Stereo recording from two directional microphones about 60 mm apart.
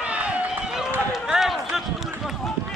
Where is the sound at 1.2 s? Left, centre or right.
Centre.